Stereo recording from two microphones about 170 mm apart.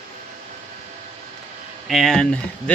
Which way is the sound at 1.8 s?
Centre (ahead or behind).